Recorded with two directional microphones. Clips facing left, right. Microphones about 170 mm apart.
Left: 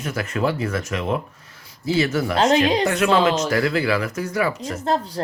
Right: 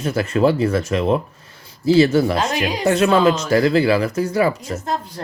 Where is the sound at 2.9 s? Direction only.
30° right (ahead or behind).